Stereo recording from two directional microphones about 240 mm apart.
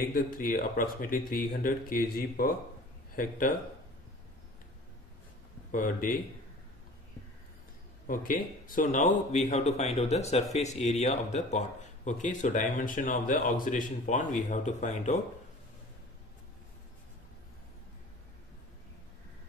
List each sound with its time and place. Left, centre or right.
0.1 s a man's voice: left
5.7 s a man's voice: left
8.1 s a man's voice: left